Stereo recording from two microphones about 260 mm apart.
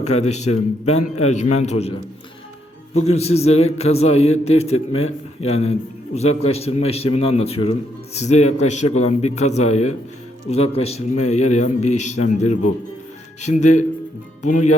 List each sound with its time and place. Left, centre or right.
0.0 s a man's voice: left